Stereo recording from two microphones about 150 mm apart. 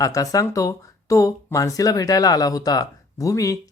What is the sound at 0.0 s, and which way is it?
Speech, 25° left (ahead or behind).